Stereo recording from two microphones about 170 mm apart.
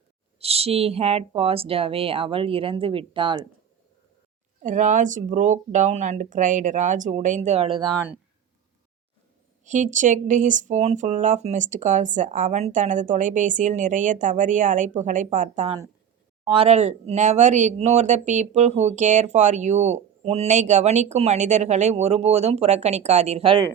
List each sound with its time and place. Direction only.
0.3 s speech: 35° right (ahead or behind)
4.6 s speech: 50° right (ahead or behind)
7.9 s speech: 10° right (ahead or behind)
9.6 s speech: 45° right (ahead or behind)